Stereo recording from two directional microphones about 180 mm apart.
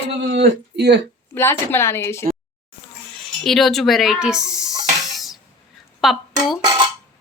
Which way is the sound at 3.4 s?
Centre (ahead or behind).